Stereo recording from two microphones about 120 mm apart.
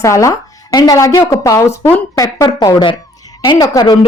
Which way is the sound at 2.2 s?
35° left (ahead or behind).